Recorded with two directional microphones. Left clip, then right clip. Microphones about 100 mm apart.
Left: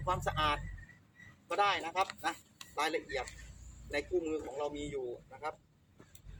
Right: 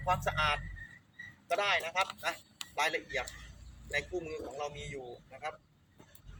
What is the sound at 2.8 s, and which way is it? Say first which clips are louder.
Speech: right 1 dB; 30° left (ahead or behind).